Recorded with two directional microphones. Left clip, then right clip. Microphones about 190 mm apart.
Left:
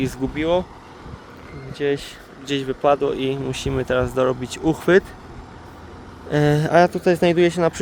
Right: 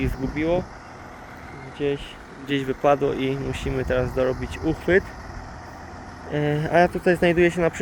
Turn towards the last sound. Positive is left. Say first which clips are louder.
# left 2 dB
turn(degrees=10)  # may be behind; listen again after turning